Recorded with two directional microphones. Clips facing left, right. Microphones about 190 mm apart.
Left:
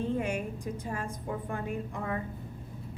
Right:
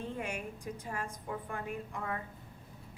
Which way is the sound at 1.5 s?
30° left (ahead or behind).